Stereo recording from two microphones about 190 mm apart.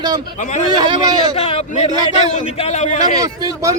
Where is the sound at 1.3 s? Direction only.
35° left (ahead or behind).